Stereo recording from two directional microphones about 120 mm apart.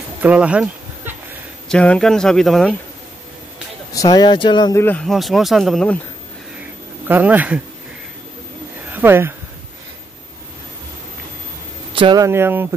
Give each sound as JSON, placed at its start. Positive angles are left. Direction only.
{"t": 0.2, "sound": "insect", "side_deg": -10}
{"t": 1.7, "sound": "speech", "side_deg": 5}
{"t": 3.9, "sound": "speech", "side_deg": 30}
{"t": 4.7, "sound": "speech", "side_deg": 15}
{"t": 5.0, "sound": "speech", "side_deg": 0}
{"t": 7.1, "sound": "speech", "side_deg": -15}
{"t": 8.8, "sound": "a sound", "side_deg": -15}
{"t": 11.9, "sound": "a sound", "side_deg": -45}
{"t": 12.2, "sound": "speech", "side_deg": -20}